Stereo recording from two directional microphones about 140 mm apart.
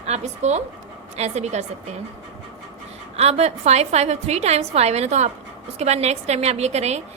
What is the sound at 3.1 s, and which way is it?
A woman's voice, 50° right (ahead or behind).